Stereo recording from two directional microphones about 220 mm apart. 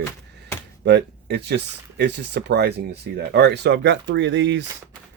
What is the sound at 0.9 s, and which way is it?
Speech, 50° right (ahead or behind).